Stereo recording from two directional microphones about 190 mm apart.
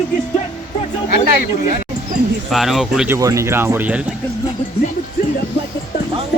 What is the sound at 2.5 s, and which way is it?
Speech, centre (ahead or behind).